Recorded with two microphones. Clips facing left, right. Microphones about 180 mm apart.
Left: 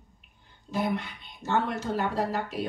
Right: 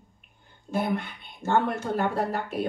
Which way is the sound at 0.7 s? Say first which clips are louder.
Right 2 dB; 55° right (ahead or behind).